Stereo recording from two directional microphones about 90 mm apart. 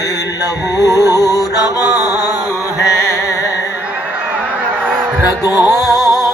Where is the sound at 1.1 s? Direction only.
40° left (ahead or behind).